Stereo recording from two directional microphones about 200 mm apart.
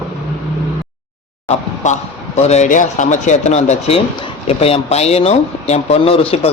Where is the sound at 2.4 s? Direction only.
35° left (ahead or behind).